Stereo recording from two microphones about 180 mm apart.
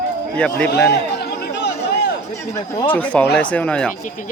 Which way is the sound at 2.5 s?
15° left (ahead or behind).